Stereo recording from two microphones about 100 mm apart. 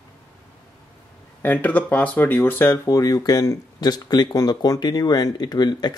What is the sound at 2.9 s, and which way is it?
Speech, 40° left (ahead or behind).